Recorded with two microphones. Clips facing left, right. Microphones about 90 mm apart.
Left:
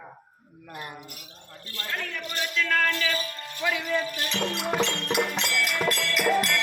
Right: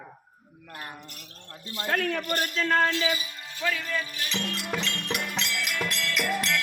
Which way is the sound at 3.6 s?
15° left (ahead or behind).